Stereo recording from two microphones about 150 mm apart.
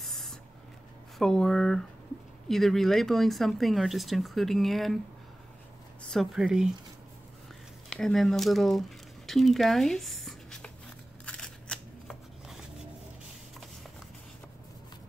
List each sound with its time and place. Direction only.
0.0 s a sound: centre (ahead or behind)
1.1 s speech: 5° left (ahead or behind)
6.0 s speech: centre (ahead or behind)
7.9 s speech: centre (ahead or behind)
11.2 s shuffling cards: 5° left (ahead or behind)